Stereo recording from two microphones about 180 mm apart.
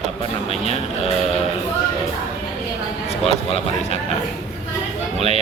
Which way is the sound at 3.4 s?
35° left (ahead or behind).